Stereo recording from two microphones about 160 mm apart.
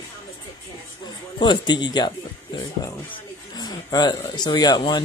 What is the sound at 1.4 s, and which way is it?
Speech, 25° left (ahead or behind).